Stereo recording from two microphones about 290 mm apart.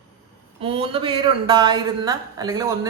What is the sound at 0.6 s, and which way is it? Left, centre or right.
Speech, centre.